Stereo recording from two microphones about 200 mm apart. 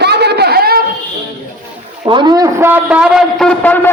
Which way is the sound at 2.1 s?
25° right (ahead or behind).